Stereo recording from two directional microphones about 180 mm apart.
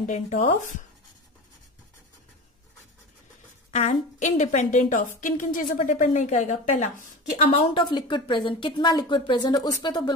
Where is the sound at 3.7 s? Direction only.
40° left (ahead or behind).